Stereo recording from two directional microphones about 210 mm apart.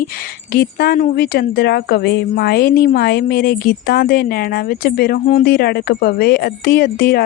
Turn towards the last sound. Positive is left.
turn(degrees=45)  # may be behind; listen again after turning